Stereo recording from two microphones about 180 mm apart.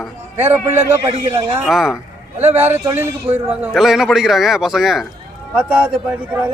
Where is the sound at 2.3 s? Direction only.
35° right (ahead or behind).